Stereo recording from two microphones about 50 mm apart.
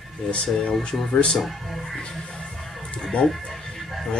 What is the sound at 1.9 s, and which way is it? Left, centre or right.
Speech, centre.